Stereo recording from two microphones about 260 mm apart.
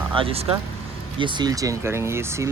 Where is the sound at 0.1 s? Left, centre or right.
Right.